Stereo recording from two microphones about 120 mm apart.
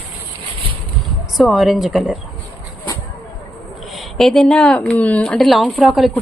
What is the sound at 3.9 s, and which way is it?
Speech, centre (ahead or behind).